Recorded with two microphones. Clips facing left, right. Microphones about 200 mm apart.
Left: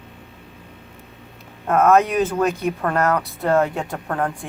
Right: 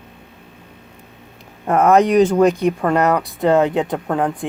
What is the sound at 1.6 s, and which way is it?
Speech, 15° right (ahead or behind).